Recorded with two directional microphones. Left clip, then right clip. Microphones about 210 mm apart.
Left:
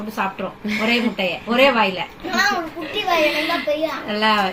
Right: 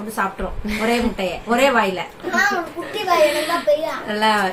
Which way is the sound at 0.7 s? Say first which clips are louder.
Even; 10° right (ahead or behind).